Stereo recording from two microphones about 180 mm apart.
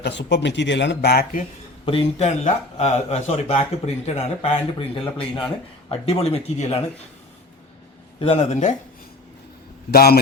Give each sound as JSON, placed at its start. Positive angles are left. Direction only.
{"t": 0.0, "sound": "speech", "side_deg": 75}
{"t": 1.8, "sound": "speech", "side_deg": 30}
{"t": 8.2, "sound": "speech", "side_deg": 35}
{"t": 9.9, "sound": "a man's voice", "side_deg": 60}